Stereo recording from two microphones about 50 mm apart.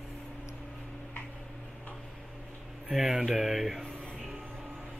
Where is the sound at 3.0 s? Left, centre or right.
Centre.